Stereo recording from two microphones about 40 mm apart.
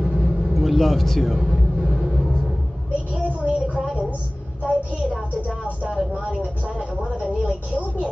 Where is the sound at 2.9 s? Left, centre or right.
Right.